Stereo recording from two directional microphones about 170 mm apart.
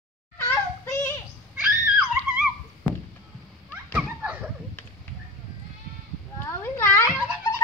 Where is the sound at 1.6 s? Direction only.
5° right (ahead or behind).